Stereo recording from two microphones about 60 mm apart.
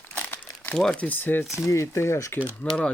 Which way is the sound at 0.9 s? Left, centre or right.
Left.